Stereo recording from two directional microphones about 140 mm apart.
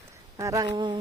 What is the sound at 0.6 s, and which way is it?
Speech, 30° right (ahead or behind).